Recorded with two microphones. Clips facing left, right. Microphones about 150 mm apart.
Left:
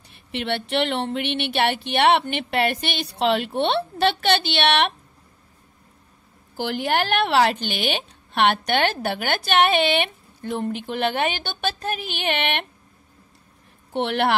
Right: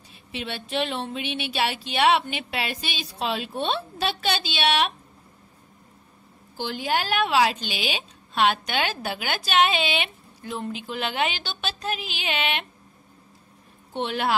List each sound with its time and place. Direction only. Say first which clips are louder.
0.3 s speech: left 6 dB; 70° left (ahead or behind)
6.5 s speech: left 3 dB; 75° left (ahead or behind); by 12.6 s 60° left (ahead or behind)
13.9 s a woman's voice: left 4 dB; 70° left (ahead or behind)